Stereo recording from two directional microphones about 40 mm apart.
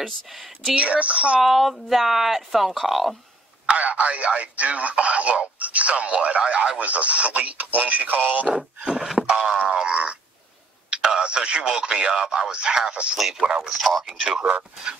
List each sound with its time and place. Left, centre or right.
0.0 s speech: centre
0.7 s speech: right
1.4 s speech: centre
3.6 s speech: right
8.5 s speech: centre
9.7 s a sound: right
10.9 s speech: centre